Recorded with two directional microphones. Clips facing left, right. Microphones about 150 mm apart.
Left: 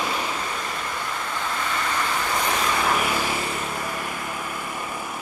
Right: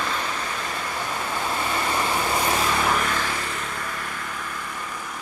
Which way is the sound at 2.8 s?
10° left (ahead or behind).